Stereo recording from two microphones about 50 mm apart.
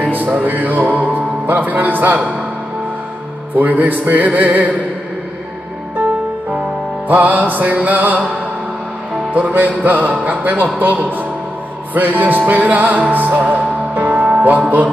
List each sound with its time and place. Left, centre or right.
0.0 s music: right
1.1 s speech: right
3.5 s music: right
7.1 s music: right
9.3 s music: right